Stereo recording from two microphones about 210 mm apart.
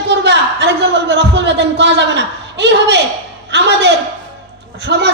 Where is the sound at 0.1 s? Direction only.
55° right (ahead or behind).